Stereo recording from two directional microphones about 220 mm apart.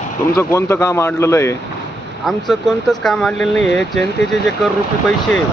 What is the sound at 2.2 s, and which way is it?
Speech, centre (ahead or behind).